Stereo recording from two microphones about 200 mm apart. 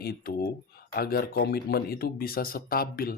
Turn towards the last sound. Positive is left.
turn(degrees=45)  # may be behind; listen again after turning